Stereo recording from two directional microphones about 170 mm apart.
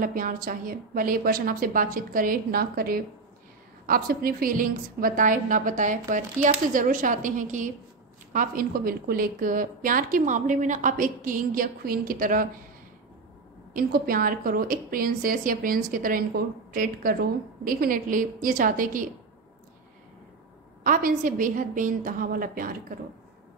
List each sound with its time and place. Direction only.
0.0 s a woman's voice: 55° right (ahead or behind)
13.7 s a woman's voice: 60° right (ahead or behind)
20.8 s a woman's voice: 55° right (ahead or behind)